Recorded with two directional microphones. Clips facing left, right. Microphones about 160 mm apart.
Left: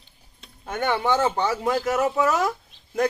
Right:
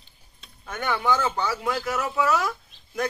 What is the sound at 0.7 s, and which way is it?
Speech, 30° left (ahead or behind).